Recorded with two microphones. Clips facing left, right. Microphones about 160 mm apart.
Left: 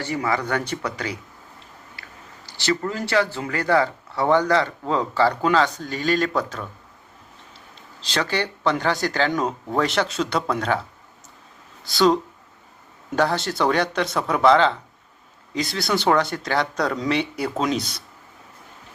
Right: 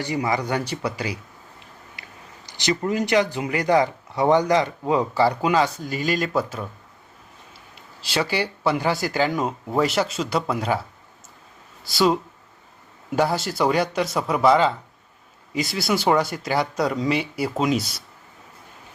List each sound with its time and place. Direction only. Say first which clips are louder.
0.0 s speech: even; 15° right (ahead or behind)
2.0 s biting: right 1 dB; 15° right (ahead or behind)
2.5 s speech: right 1 dB; 15° right (ahead or behind)
7.8 s speech: right 1 dB; 10° right (ahead or behind)
11.9 s speech: left 2 dB; 5° right (ahead or behind)